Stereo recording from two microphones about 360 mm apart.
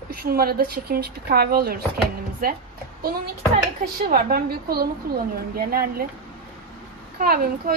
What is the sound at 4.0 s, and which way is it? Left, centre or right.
A woman's voice, right.